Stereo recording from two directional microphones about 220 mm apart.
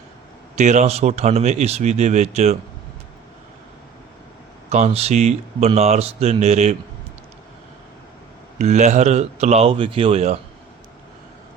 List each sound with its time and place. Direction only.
0.5 s speech: 30° right (ahead or behind)
4.7 s speech: 30° right (ahead or behind)
8.5 s speech: 30° right (ahead or behind)